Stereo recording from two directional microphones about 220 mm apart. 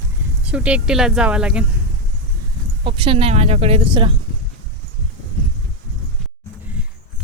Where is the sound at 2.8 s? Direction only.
20° right (ahead or behind).